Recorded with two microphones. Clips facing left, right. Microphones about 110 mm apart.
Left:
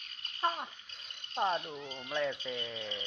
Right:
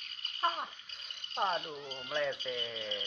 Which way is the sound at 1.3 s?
10° left (ahead or behind).